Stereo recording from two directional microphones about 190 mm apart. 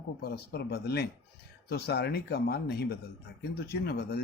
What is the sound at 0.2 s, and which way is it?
Speech, 55° left (ahead or behind).